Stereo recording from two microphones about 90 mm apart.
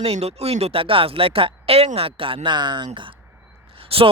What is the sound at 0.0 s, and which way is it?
Speech, 90° right.